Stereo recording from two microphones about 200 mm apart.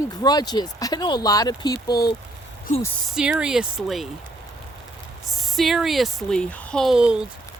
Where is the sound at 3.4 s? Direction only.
5° right (ahead or behind).